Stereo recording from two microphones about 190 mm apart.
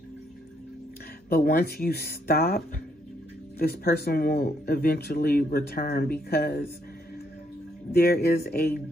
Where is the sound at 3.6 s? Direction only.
55° left (ahead or behind).